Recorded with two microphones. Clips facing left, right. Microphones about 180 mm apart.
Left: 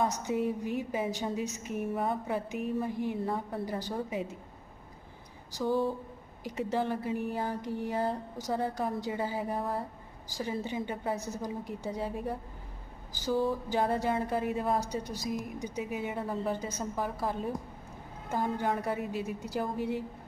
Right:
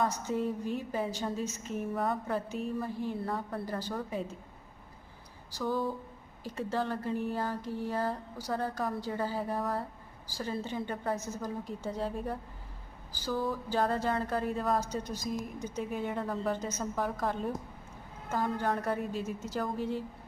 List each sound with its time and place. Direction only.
0.0 s a woman's voice: 15° left (ahead or behind)
5.5 s a sound: 25° left (ahead or behind)
6.4 s a woman's voice: 15° left (ahead or behind)
13.2 s a sound: 25° left (ahead or behind)
13.7 s a woman's voice: 15° left (ahead or behind)
18.3 s a woman's voice: 15° left (ahead or behind)